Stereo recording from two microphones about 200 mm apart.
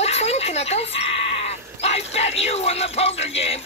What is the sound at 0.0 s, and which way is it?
Speech, 30° left (ahead or behind).